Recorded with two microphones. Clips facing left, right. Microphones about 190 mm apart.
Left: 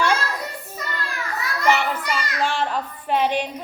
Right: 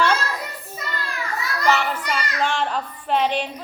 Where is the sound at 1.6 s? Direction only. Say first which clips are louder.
Left 1 dB; 10° left (ahead or behind).